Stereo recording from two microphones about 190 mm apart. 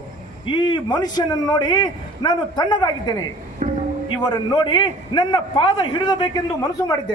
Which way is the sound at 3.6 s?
40° right (ahead or behind).